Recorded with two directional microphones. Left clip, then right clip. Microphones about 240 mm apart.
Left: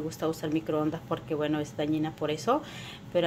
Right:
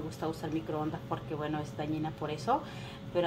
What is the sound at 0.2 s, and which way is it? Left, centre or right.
A woman's voice, left.